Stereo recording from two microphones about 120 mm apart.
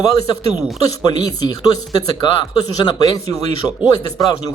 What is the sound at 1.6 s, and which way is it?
Speech, 35° left (ahead or behind).